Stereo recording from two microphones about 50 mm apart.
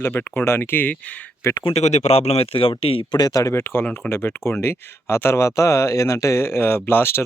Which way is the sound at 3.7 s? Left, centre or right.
Left.